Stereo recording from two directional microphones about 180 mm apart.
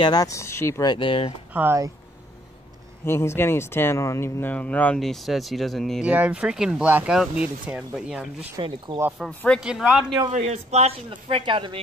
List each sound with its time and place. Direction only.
0.0 s speech: 20° left (ahead or behind)
1.5 s speech: 10° right (ahead or behind)
3.1 s speech: 15° left (ahead or behind); by 8.5 s 5° right (ahead or behind)
8.5 s speech: 25° right (ahead or behind)
9.2 s speech: 5° left (ahead or behind)
10.3 s speech: 35° right (ahead or behind)